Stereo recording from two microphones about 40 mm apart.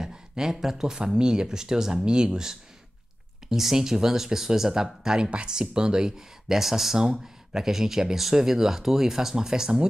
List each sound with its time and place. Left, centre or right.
0.0 s speech: centre